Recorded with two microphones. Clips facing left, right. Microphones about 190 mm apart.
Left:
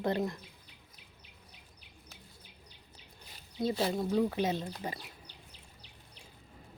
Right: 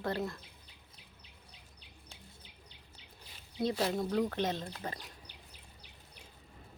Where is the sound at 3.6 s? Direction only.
Centre (ahead or behind).